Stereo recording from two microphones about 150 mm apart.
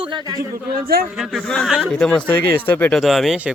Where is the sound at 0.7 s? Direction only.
80° right.